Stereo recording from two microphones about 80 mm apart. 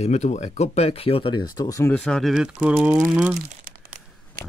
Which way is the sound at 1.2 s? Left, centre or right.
Left.